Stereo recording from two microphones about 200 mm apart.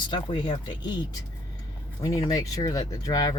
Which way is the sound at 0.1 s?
25° left (ahead or behind).